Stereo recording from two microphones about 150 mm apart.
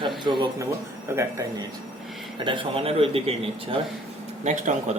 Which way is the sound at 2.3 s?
35° right (ahead or behind).